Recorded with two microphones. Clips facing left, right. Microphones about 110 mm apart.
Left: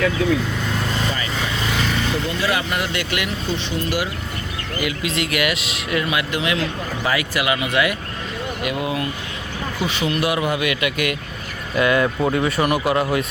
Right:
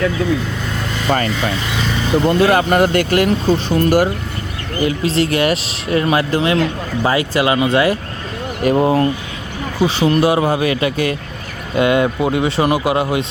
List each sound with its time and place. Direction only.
2.2 s speech: 50° right (ahead or behind)
4.8 s speech: 35° right (ahead or behind)